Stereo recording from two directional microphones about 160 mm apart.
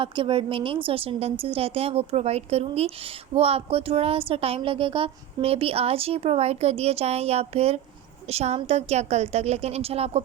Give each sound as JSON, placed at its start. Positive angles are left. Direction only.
{"t": 0.0, "sound": "a woman's voice", "side_deg": -30}